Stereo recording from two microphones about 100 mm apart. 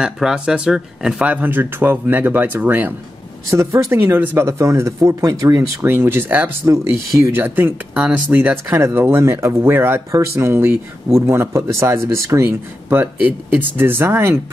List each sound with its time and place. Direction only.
0.0 s speech: 5° right (ahead or behind)
3.4 s speech: 30° right (ahead or behind)
4.5 s speech: 30° right (ahead or behind)
6.6 s speech: 35° right (ahead or behind)
7.3 s speech: 20° right (ahead or behind)